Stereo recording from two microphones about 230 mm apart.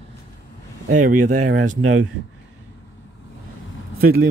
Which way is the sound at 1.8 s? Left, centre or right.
Right.